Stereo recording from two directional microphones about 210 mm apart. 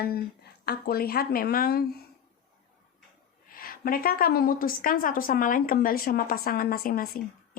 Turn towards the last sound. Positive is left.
turn(degrees=45)  # may be behind; listen again after turning